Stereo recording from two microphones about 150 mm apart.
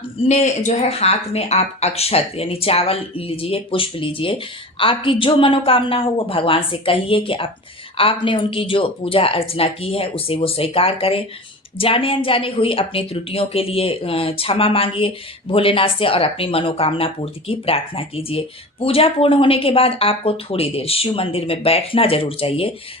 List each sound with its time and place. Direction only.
0.3 s a woman's voice: 45° left (ahead or behind)